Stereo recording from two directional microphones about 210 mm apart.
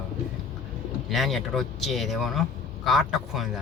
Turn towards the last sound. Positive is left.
turn(degrees=0)  # may be behind; listen again after turning